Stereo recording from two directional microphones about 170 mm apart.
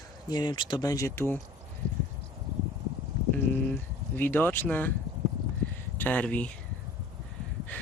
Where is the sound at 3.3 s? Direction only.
10° left (ahead or behind).